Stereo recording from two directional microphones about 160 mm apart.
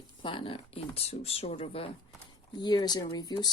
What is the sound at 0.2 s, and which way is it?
Speech, 30° left (ahead or behind).